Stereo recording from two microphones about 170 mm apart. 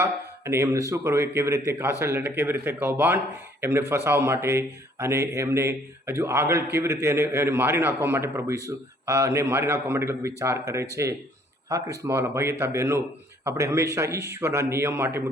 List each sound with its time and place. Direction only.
0.0 s a man's voice: 15° right (ahead or behind)